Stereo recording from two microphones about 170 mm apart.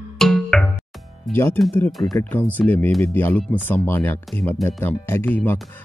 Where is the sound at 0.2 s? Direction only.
Centre (ahead or behind).